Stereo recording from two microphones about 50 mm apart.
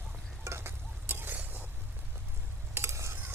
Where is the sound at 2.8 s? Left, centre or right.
Right.